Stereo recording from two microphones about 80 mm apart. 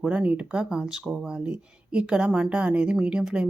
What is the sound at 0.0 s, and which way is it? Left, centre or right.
Speech, centre.